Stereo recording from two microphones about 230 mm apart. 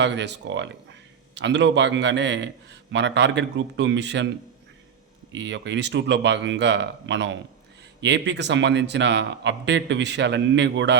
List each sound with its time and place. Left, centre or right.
0.0 s a man's voice: right
5.3 s a man's voice: right